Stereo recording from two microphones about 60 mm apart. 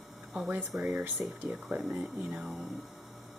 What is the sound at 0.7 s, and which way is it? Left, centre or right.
Speech, centre.